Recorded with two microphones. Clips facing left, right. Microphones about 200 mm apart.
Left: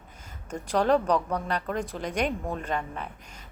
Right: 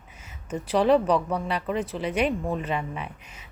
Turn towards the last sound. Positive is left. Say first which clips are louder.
# right 2 dB
turn(degrees=-5)  # may be behind; listen again after turning